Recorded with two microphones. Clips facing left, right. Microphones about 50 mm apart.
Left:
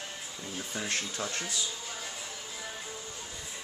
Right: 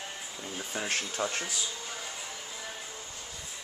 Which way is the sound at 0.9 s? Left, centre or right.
Right.